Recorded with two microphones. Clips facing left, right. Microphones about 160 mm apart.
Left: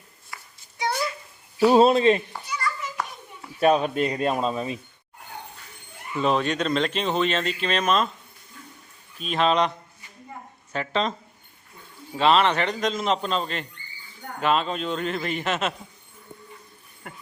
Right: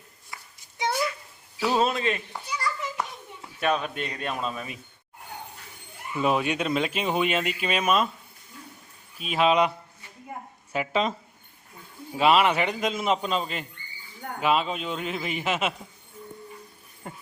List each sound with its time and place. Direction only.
0.3 s a sound: 20° right (ahead or behind)
1.6 s speech: 35° left (ahead or behind)
3.6 s speech: 35° left (ahead or behind)
6.1 s speech: 10° right (ahead or behind)
9.1 s speech: 5° right (ahead or behind)
12.1 s speech: 10° right (ahead or behind)